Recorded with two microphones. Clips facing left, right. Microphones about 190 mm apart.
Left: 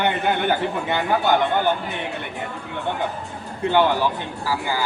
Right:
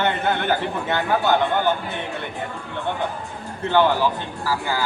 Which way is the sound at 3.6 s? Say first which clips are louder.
Even; 15° left (ahead or behind).